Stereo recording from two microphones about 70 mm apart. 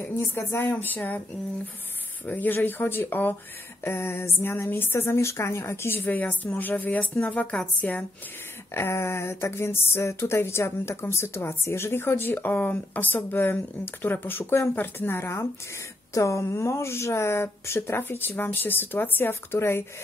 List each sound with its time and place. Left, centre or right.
0.0 s speech: left
2.2 s speech: left
8.7 s speech: left
16.1 s speech: left